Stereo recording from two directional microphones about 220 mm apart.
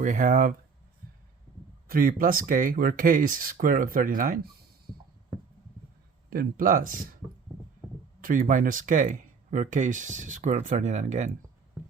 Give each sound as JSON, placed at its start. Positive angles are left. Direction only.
{"t": 0.0, "sound": "speech", "side_deg": -35}
{"t": 1.9, "sound": "speech", "side_deg": -40}
{"t": 6.3, "sound": "speech", "side_deg": -40}
{"t": 8.2, "sound": "speech", "side_deg": -40}